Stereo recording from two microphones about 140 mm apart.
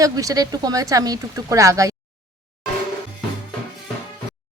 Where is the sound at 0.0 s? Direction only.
25° right (ahead or behind).